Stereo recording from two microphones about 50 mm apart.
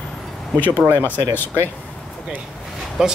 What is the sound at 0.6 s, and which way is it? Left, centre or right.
Speech, left.